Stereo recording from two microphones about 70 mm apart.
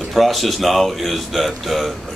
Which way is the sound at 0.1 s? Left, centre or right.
Centre.